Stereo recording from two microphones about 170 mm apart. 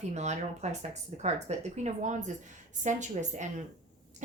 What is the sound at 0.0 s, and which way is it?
Speech, 40° right (ahead or behind).